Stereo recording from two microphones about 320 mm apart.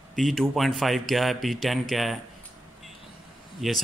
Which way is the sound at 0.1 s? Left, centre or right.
Centre.